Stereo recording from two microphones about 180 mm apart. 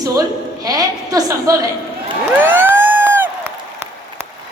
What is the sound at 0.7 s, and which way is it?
Speech, 20° right (ahead or behind).